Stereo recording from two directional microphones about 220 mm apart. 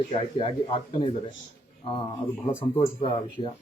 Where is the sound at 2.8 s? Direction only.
25° left (ahead or behind).